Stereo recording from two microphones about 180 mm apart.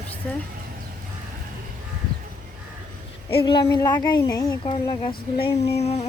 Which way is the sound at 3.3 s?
30° left (ahead or behind).